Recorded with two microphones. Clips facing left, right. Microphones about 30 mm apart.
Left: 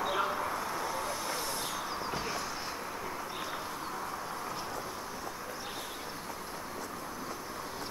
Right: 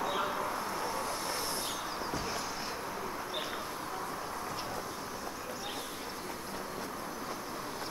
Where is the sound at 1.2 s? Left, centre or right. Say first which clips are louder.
Even; centre.